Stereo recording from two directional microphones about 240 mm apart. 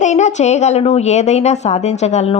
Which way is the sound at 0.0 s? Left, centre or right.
Left.